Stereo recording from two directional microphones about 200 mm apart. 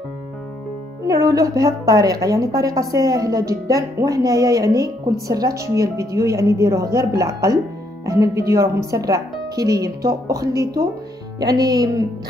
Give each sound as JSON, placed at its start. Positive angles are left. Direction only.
{"t": 1.0, "sound": "speech", "side_deg": -15}